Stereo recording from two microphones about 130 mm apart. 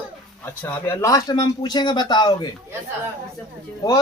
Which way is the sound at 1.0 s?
25° left (ahead or behind).